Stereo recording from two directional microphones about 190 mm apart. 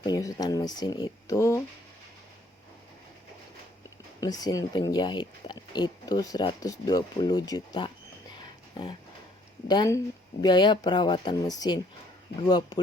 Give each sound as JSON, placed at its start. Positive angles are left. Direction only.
{"t": 0.0, "sound": "speech", "side_deg": 20}
{"t": 4.2, "sound": "speech", "side_deg": 20}